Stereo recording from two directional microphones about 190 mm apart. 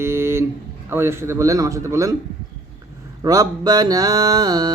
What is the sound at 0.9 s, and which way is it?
Speech, 10° right (ahead or behind).